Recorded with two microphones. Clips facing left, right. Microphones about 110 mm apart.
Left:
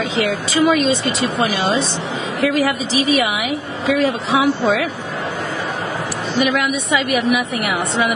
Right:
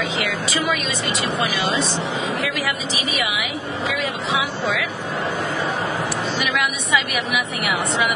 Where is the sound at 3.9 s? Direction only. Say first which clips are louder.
Left 9 dB; 35° left (ahead or behind).